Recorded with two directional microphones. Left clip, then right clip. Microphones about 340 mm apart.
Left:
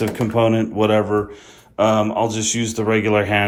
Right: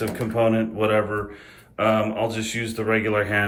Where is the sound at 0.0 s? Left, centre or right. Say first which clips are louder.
Left 4 dB; centre.